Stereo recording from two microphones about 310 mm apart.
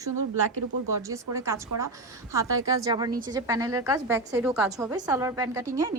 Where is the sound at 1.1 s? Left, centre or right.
Centre.